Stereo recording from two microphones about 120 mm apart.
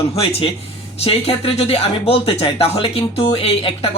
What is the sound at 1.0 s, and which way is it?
Speech, 55° left (ahead or behind).